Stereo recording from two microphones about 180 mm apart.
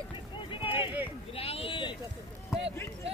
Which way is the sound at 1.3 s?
30° left (ahead or behind).